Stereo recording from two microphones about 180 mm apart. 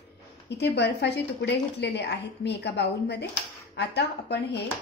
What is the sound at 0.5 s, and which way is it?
A woman's voice, 70° left (ahead or behind).